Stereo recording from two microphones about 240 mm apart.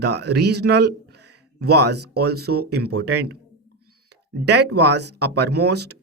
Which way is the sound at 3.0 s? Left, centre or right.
Right.